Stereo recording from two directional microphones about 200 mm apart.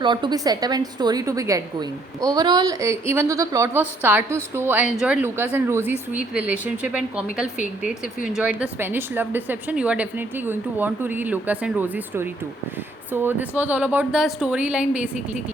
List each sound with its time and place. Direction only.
0.0 s a woman's voice: 25° right (ahead or behind); by 15.4 s 5° right (ahead or behind)